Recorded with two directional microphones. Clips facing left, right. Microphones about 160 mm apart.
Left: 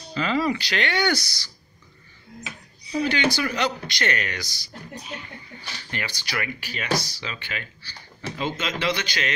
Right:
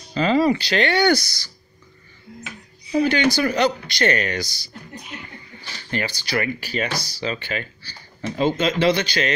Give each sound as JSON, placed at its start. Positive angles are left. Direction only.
{"t": 0.1, "sound": "speech", "side_deg": -35}
{"t": 1.1, "sound": "speech", "side_deg": -50}
{"t": 2.9, "sound": "speech", "side_deg": -45}
{"t": 5.9, "sound": "speech", "side_deg": -35}